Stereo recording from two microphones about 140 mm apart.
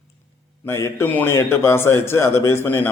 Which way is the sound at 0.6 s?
20° left (ahead or behind).